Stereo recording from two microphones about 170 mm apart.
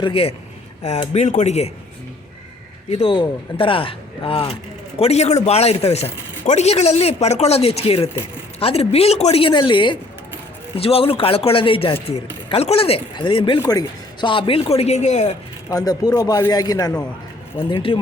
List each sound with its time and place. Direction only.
0.0 s speech: 35° left (ahead or behind)
1.1 s speech: 45° left (ahead or behind)
2.9 s speech: 30° left (ahead or behind)
15.7 s speech: 20° left (ahead or behind)